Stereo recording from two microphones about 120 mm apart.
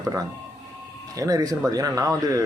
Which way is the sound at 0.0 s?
25° right (ahead or behind).